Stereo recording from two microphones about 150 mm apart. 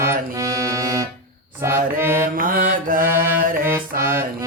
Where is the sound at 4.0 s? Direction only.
15° right (ahead or behind).